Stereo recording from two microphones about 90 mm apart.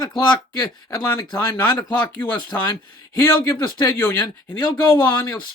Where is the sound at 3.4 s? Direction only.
30° left (ahead or behind).